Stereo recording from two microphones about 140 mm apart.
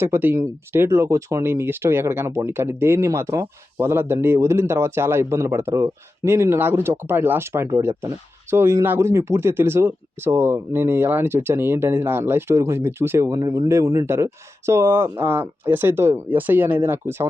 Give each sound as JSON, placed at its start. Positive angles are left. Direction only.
{"t": 0.0, "sound": "speech", "side_deg": -15}